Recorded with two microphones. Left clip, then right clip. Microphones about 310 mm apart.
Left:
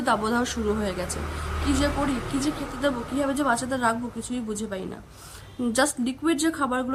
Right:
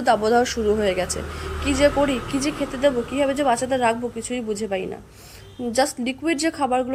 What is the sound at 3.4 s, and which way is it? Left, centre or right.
Speech, centre.